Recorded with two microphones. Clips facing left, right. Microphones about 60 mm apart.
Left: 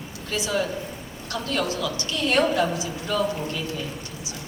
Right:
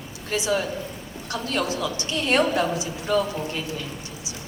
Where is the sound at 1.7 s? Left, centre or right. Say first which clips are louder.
Right 1 dB; right.